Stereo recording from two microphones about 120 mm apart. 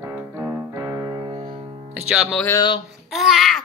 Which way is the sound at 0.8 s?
25° right (ahead or behind).